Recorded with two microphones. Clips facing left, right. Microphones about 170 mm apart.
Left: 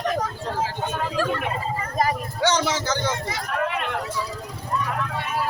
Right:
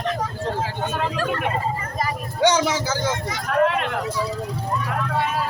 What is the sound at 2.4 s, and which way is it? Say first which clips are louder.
Speech: right 3 dB; 10° right (ahead or behind).